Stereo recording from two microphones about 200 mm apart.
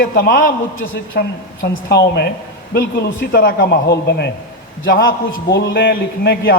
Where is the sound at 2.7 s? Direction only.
60° left (ahead or behind).